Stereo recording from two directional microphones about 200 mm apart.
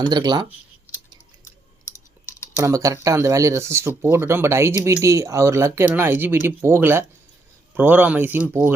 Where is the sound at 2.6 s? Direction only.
15° right (ahead or behind).